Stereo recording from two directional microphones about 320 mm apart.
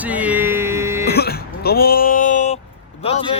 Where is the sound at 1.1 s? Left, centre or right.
Left.